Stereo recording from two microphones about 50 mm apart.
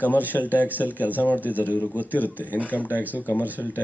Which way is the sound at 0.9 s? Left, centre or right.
Right.